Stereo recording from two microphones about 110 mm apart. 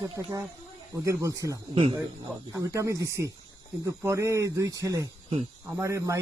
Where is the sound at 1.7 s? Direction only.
60° right (ahead or behind).